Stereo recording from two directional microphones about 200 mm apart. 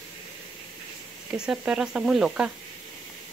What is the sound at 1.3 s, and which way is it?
Speech, 5° right (ahead or behind).